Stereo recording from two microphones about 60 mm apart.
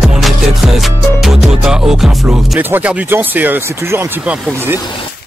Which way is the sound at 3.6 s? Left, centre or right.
Right.